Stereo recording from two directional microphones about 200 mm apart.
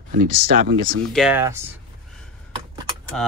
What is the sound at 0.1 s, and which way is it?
Speech, 45° right (ahead or behind).